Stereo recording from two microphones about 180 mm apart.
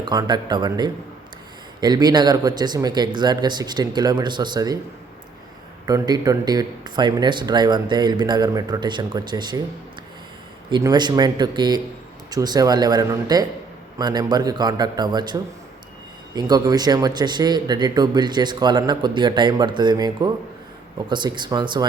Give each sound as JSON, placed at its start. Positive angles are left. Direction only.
{"t": 0.0, "sound": "speech", "side_deg": -25}
{"t": 5.8, "sound": "speech", "side_deg": -20}
{"t": 10.7, "sound": "speech", "side_deg": -25}